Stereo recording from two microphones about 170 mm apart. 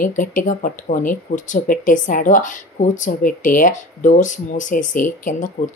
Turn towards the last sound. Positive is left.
turn(degrees=50)  # may be behind; listen again after turning